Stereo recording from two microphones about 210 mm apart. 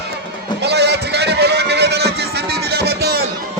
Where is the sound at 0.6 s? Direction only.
50° right (ahead or behind).